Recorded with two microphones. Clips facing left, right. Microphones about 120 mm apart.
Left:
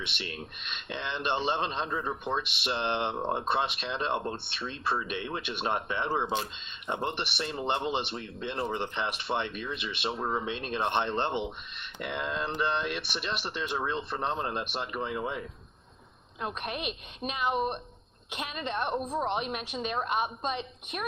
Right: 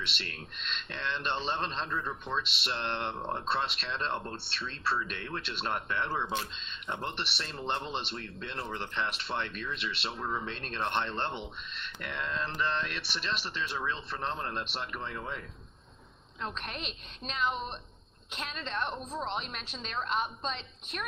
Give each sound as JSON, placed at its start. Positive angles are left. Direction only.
{"t": 0.0, "sound": "speech", "side_deg": 15}
{"t": 10.2, "sound": "speech", "side_deg": 30}
{"t": 10.4, "sound": "speech", "side_deg": 15}